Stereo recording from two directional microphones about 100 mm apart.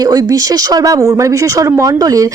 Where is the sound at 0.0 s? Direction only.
40° right (ahead or behind).